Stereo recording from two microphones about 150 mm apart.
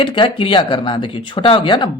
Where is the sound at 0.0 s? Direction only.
35° left (ahead or behind).